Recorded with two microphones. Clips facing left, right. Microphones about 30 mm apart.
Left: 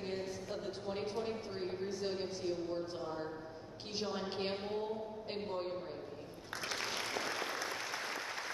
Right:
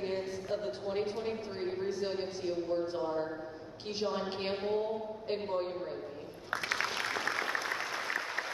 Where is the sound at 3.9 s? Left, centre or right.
Centre.